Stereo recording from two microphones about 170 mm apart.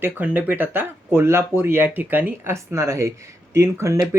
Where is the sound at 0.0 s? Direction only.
10° right (ahead or behind).